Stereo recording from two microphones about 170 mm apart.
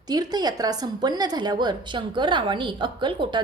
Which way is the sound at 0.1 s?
25° right (ahead or behind).